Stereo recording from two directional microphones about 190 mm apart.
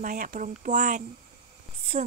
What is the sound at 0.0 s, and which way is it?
Speech, 45° right (ahead or behind).